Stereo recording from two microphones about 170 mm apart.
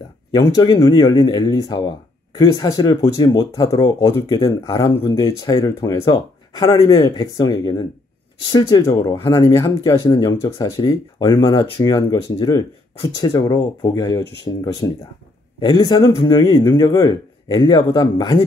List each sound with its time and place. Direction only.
0.3 s speech: 25° left (ahead or behind)